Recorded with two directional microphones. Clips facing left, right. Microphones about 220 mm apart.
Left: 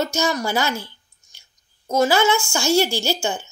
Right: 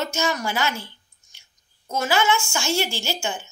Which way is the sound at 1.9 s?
40° left (ahead or behind).